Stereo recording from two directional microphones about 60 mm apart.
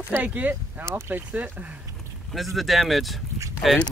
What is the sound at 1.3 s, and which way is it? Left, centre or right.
Speech, right.